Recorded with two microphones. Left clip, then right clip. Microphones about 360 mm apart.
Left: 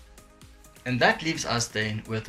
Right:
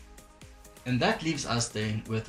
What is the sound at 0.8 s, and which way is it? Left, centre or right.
Speech, centre.